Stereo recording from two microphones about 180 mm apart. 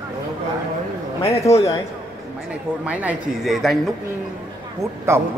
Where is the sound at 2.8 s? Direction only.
10° right (ahead or behind).